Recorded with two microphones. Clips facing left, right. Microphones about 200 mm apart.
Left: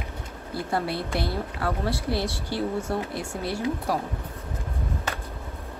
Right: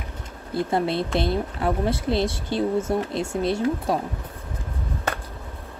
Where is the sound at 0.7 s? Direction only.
20° right (ahead or behind).